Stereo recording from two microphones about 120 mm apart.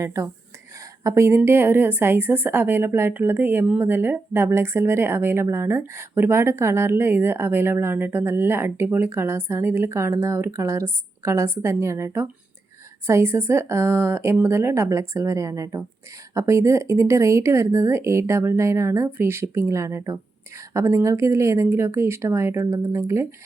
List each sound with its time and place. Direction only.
0.0 s a woman's voice: 25° right (ahead or behind)